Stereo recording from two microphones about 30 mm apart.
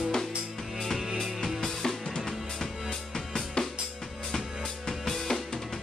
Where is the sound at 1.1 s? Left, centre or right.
Centre.